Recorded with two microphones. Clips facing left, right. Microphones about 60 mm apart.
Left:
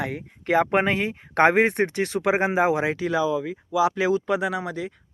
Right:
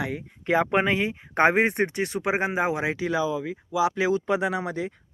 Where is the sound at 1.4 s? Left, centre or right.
Left.